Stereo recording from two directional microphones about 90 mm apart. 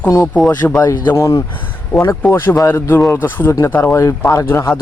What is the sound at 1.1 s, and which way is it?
Speech, 35° left (ahead or behind).